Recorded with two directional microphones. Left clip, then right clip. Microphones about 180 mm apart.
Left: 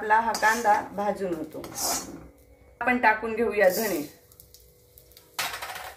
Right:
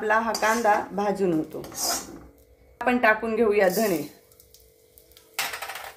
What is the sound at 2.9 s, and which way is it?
Speech, 60° right (ahead or behind).